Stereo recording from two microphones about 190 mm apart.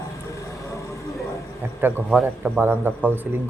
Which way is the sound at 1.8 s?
10° right (ahead or behind).